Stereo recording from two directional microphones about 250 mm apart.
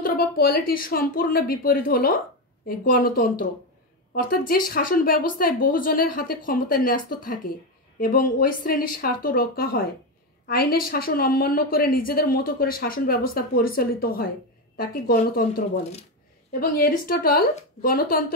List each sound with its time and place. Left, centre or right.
0.0 s a woman's voice: left